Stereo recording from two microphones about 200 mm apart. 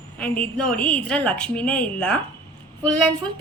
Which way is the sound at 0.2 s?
5° left (ahead or behind).